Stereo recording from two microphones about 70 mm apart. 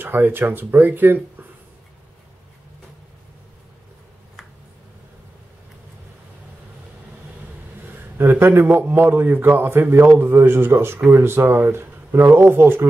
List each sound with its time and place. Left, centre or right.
0.0 s speech: right
7.8 s a man's voice: right